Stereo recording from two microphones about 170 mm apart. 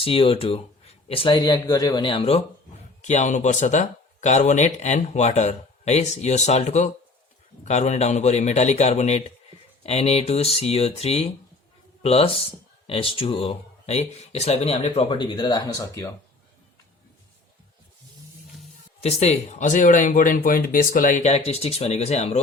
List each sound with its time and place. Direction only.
0.0 s speech: 35° left (ahead or behind)
3.1 s speech: 45° left (ahead or behind); by 16.1 s 20° left (ahead or behind)
19.0 s speech: 40° left (ahead or behind)